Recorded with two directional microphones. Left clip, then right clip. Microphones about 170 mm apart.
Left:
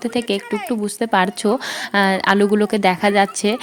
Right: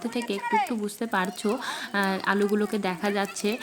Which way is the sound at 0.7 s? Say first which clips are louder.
Left 10 dB; 40° left (ahead or behind).